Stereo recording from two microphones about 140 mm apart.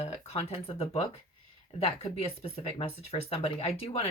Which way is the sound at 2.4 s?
45° left (ahead or behind).